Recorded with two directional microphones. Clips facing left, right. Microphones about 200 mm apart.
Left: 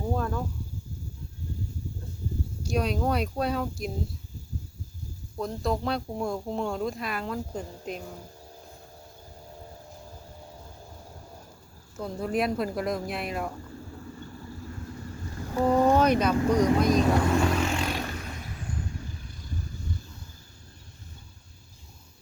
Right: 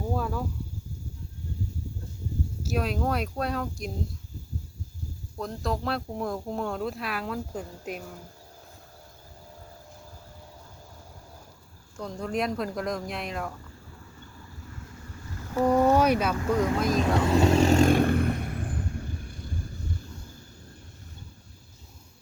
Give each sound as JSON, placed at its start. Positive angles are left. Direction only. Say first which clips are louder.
{"t": 0.1, "sound": "a sound", "louder": "left 1 dB", "side_deg": -5}
{"t": 2.6, "sound": "speech", "louder": "left 1 dB", "side_deg": 0}
{"t": 5.4, "sound": "speech", "louder": "left 2 dB", "side_deg": 0}
{"t": 11.9, "sound": "speech", "louder": "left 2 dB", "side_deg": 5}
{"t": 16.0, "sound": "speech", "louder": "left 1 dB", "side_deg": -10}
{"t": 16.5, "sound": "speech", "louder": "left 2 dB", "side_deg": 15}
{"t": 16.8, "sound": "speech", "louder": "left 2 dB", "side_deg": 0}
{"t": 17.2, "sound": "vehicle", "louder": "right 3 dB", "side_deg": -25}